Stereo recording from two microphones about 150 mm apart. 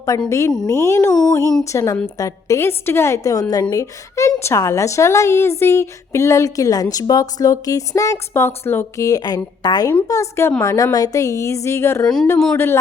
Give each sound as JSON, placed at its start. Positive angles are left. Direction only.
{"t": 0.3, "sound": "a woman's voice", "side_deg": 20}
{"t": 12.0, "sound": "speech", "side_deg": 5}
{"t": 12.5, "sound": "a man's voice", "side_deg": 15}